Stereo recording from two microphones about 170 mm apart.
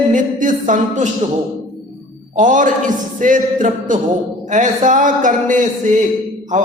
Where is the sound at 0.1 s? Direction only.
50° right (ahead or behind).